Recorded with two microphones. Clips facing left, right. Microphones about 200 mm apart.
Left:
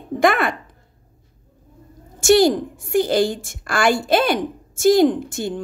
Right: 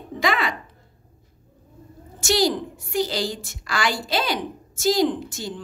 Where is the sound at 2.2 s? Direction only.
55° left (ahead or behind).